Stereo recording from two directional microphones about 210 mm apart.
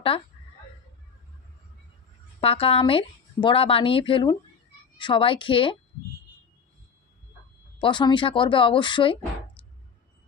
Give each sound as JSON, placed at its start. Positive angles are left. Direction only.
{"t": 2.4, "sound": "a woman's voice", "side_deg": 25}
{"t": 7.8, "sound": "a woman's voice", "side_deg": 20}